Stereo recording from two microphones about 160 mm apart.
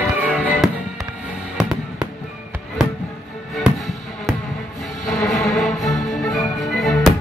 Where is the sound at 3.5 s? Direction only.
Centre (ahead or behind).